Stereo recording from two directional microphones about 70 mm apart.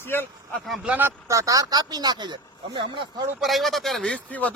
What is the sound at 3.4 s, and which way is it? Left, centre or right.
Speech, centre.